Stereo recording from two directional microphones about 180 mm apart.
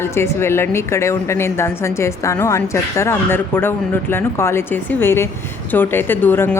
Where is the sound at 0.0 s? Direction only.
15° left (ahead or behind).